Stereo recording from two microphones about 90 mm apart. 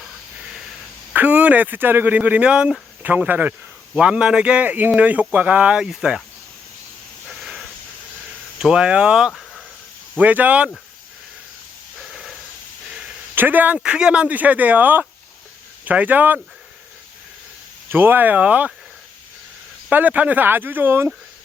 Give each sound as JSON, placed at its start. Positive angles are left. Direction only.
{"t": 0.0, "sound": "a sound", "side_deg": -5}
{"t": 1.1, "sound": "speech", "side_deg": -20}
{"t": 7.3, "sound": "hiss", "side_deg": 0}
{"t": 8.5, "sound": "speech", "side_deg": -10}
{"t": 11.9, "sound": "hiss", "side_deg": 0}
{"t": 12.9, "sound": "a sound", "side_deg": -10}
{"t": 13.3, "sound": "speech", "side_deg": -20}
{"t": 13.7, "sound": "speech", "side_deg": -10}
{"t": 17.8, "sound": "speech", "side_deg": -25}
{"t": 19.9, "sound": "speech", "side_deg": -20}